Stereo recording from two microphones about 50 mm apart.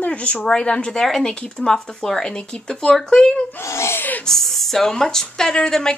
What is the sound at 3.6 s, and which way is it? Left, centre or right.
Speech, left.